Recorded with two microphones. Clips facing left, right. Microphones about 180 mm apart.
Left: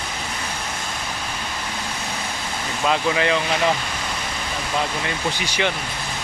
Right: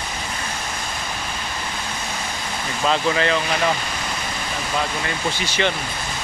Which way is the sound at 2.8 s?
10° left (ahead or behind).